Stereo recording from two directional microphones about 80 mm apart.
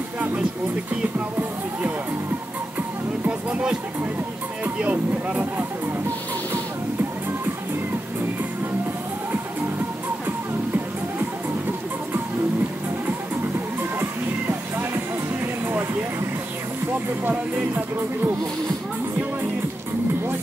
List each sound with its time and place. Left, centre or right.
0.2 s music: centre
3.3 s music: centre
4.6 s speech: centre
6.5 s music: right
17.2 s speech: right